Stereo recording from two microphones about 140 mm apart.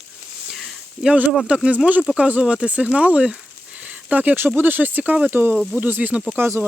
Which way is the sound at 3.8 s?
10° right (ahead or behind).